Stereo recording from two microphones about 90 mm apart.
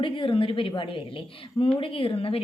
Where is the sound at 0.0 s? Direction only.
75° left (ahead or behind).